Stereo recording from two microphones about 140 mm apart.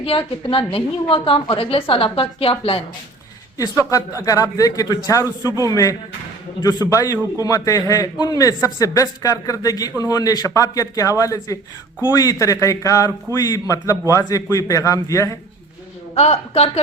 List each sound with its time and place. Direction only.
0.0 s a woman's voice: 40° left (ahead or behind)
3.6 s speech: 25° left (ahead or behind)
16.1 s a woman's voice: 50° left (ahead or behind)